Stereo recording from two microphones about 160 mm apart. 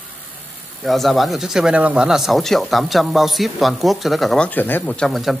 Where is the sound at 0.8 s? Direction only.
Centre (ahead or behind).